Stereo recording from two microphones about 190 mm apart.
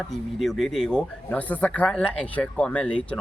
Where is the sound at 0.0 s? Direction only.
Centre (ahead or behind).